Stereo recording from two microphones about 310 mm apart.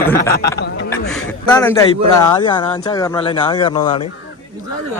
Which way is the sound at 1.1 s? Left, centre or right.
Centre.